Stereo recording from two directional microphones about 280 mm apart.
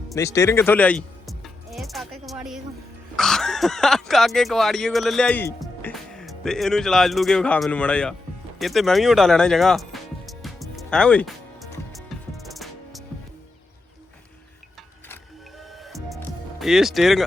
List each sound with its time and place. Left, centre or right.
0.1 s music: centre
3.2 s speech: centre
8.5 s music: centre
15.9 s music: centre